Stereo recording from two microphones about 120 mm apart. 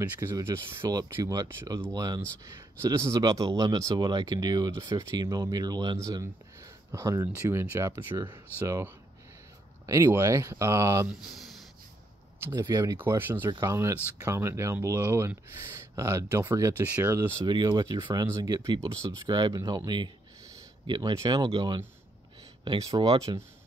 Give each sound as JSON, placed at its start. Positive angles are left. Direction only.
{"t": 0.0, "sound": "speech", "side_deg": -25}
{"t": 11.1, "sound": "speech", "side_deg": 0}
{"t": 12.4, "sound": "speech", "side_deg": -20}
{"t": 12.6, "sound": "speech", "side_deg": -35}
{"t": 12.9, "sound": "speech", "side_deg": -20}
{"t": 17.5, "sound": "speech", "side_deg": -35}
{"t": 20.8, "sound": "speech", "side_deg": -35}